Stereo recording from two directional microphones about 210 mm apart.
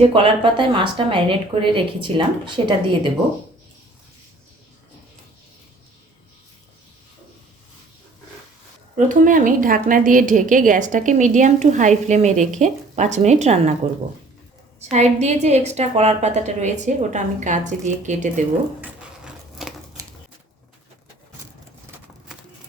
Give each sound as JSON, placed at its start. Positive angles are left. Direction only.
{"t": 0.0, "sound": "a woman's voice", "side_deg": -25}
{"t": 9.0, "sound": "a woman's voice", "side_deg": -40}
{"t": 14.8, "sound": "a woman's voice", "side_deg": -30}
{"t": 18.8, "sound": "a sound", "side_deg": -5}